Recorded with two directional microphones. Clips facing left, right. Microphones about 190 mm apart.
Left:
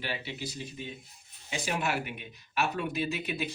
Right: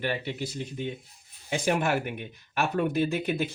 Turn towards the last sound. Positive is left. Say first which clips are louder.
# right 6 dB
turn(degrees=-50)  # may be behind; listen again after turning